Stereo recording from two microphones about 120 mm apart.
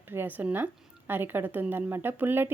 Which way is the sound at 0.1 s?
15° right (ahead or behind).